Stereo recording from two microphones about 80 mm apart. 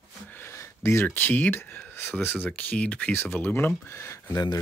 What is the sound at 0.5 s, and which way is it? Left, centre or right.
Speech, left.